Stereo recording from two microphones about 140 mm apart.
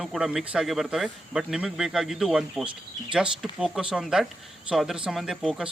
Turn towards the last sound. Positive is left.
turn(degrees=-5)  # may be behind; listen again after turning